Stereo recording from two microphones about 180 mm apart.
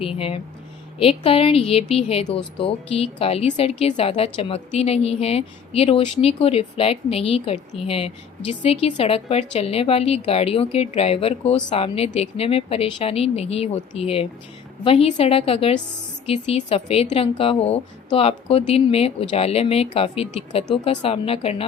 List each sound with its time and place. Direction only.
0.2 s speech: 30° left (ahead or behind)